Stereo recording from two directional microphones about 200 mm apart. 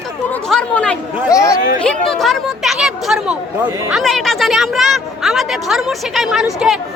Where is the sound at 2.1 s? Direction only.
Centre (ahead or behind).